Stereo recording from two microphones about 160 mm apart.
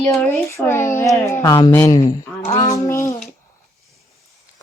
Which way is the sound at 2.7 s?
20° left (ahead or behind).